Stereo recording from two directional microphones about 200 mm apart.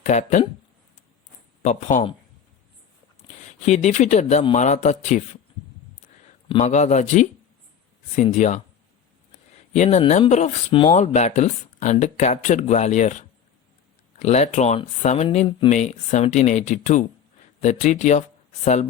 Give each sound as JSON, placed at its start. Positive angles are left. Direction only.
{"t": 0.0, "sound": "speech", "side_deg": 35}
{"t": 1.6, "sound": "speech", "side_deg": 35}
{"t": 3.2, "sound": "a sound", "side_deg": 25}
{"t": 3.7, "sound": "speech", "side_deg": 35}
{"t": 6.5, "sound": "speech", "side_deg": 35}
{"t": 9.7, "sound": "speech", "side_deg": 35}